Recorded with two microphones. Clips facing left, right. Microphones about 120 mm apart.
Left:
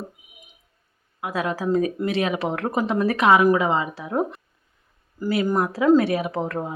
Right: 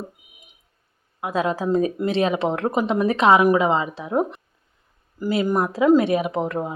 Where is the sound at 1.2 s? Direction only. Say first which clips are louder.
Right 3 dB; 25° right (ahead or behind).